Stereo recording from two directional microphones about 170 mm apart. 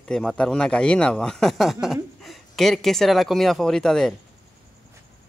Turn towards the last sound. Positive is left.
turn(degrees=5)  # may be behind; listen again after turning